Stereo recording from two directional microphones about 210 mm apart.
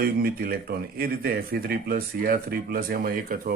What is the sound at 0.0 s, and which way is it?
Speech, 45° right (ahead or behind).